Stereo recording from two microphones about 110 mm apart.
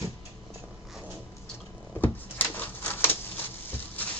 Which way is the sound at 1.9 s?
15° left (ahead or behind).